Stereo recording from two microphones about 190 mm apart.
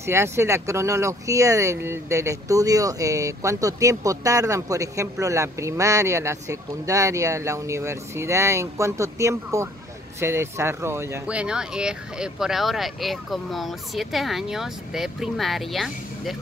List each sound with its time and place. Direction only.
0.0 s speech: 15° right (ahead or behind)